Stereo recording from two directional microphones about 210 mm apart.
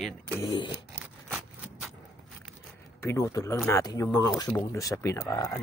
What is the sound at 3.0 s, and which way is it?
Speech, 15° left (ahead or behind).